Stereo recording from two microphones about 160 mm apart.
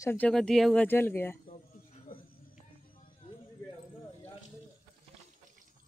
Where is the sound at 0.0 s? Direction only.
15° left (ahead or behind).